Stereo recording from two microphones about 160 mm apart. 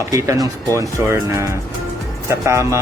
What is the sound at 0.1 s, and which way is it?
Speech, 20° right (ahead or behind).